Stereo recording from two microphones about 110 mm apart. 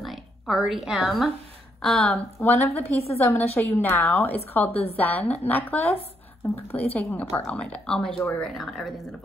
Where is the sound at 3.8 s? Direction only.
20° left (ahead or behind).